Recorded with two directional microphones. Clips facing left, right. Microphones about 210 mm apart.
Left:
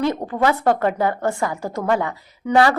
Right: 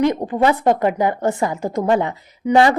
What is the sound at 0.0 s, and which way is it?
A woman's voice, 15° right (ahead or behind).